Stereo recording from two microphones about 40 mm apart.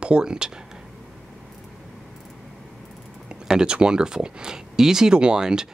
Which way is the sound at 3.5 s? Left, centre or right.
Right.